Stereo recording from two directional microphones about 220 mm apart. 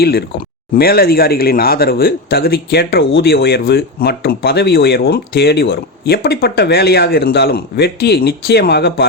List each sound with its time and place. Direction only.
0.0 s speech: 45° left (ahead or behind)